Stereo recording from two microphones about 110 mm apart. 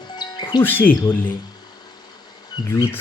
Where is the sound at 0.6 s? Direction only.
15° left (ahead or behind).